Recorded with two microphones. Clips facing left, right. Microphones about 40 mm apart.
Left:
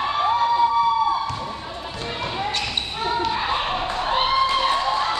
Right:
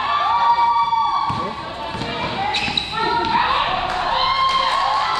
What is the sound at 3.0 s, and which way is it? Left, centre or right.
Basketball bounce, right.